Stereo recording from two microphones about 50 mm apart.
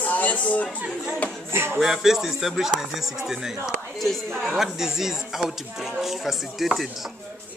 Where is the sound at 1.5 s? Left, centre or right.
Right.